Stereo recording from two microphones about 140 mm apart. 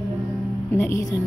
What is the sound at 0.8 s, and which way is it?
Speech, 20° left (ahead or behind).